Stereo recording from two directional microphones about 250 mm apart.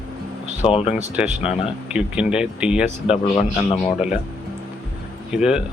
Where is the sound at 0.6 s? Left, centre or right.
Left.